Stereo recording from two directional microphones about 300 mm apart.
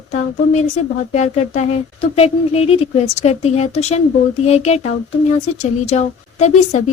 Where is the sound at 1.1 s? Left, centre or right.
Left.